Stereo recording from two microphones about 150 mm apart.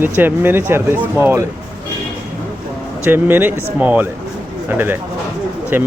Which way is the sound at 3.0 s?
10° right (ahead or behind).